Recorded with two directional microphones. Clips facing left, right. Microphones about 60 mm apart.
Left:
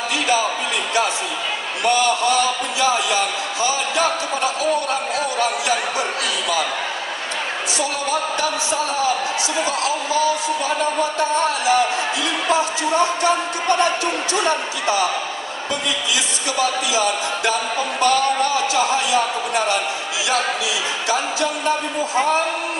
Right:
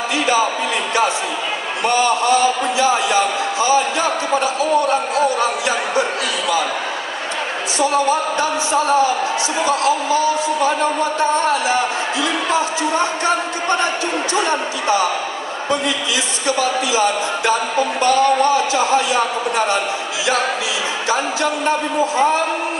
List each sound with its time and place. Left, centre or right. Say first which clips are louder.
1.9 s a man's voice: right 2 dB; right
5.1 s speech: right 4 dB; right
7.8 s speech: right 7 dB; right
16.9 s speech: right 3 dB; right
21.1 s speech: right 2 dB; right